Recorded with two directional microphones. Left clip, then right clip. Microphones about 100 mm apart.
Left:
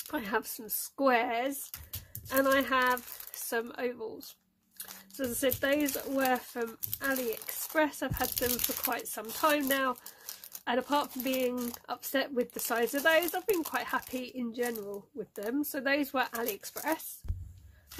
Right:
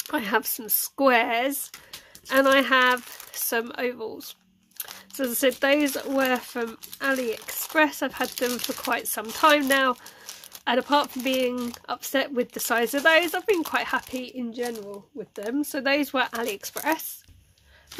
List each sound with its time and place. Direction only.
0.1 s speech: 30° right (ahead or behind)
4.7 s a sound: 25° right (ahead or behind)
5.5 s speech: 35° right (ahead or behind)
14.1 s speech: 10° right (ahead or behind)
14.5 s speech: 5° left (ahead or behind)
15.5 s speech: 15° right (ahead or behind)